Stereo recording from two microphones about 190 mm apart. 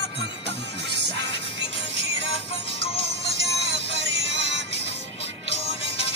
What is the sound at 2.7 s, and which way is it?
Music, 30° left (ahead or behind).